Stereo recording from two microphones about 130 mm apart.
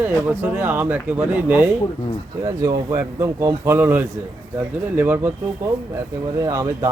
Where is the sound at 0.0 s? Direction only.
15° right (ahead or behind).